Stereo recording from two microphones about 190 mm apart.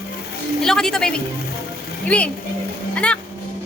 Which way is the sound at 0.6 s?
Centre (ahead or behind).